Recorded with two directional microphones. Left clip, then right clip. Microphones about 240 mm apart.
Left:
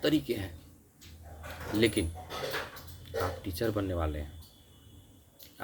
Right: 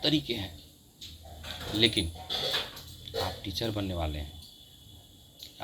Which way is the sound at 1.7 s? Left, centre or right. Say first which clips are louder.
Right 2 dB; left.